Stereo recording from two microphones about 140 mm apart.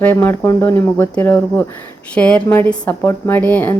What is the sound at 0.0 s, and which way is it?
A woman's voice, 15° left (ahead or behind).